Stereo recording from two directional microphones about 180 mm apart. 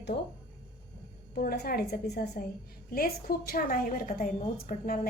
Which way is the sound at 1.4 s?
60° left (ahead or behind).